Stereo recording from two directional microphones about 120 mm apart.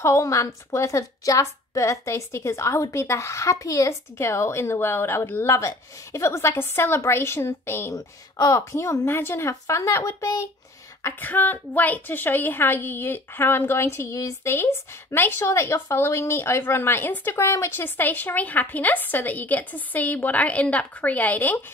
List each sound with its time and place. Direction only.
0.0 s a woman's voice: 25° left (ahead or behind)